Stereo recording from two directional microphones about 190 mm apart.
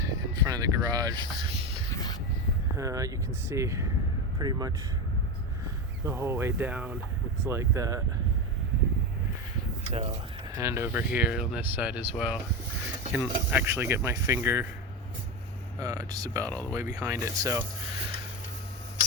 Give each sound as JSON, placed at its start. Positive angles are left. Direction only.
{"t": 0.0, "sound": "a sound", "side_deg": -20}
{"t": 2.7, "sound": "speech", "side_deg": -15}
{"t": 6.1, "sound": "speech", "side_deg": -15}
{"t": 10.6, "sound": "speech", "side_deg": -15}
{"t": 15.8, "sound": "speech", "side_deg": -20}
{"t": 16.4, "sound": "speech", "side_deg": 10}
{"t": 17.0, "sound": "speech", "side_deg": -15}